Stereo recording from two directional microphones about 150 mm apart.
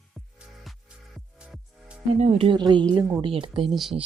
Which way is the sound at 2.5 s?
30° right (ahead or behind).